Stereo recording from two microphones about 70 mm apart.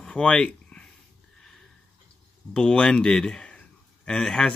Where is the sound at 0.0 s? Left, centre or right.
Centre.